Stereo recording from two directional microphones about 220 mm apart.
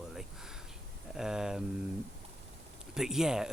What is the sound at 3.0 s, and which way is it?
Speech, centre (ahead or behind).